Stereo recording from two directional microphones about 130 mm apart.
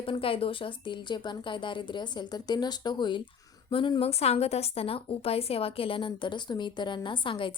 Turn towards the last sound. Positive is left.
turn(degrees=40)  # may be behind; listen again after turning